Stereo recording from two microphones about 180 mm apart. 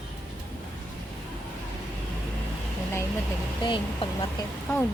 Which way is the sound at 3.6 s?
30° left (ahead or behind).